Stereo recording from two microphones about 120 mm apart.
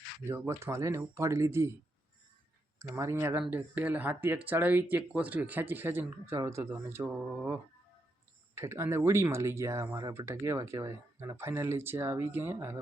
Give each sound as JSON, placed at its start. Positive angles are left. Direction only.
{"t": 0.3, "sound": "speech", "side_deg": -25}
{"t": 2.7, "sound": "speech", "side_deg": -25}
{"t": 8.5, "sound": "speech", "side_deg": -20}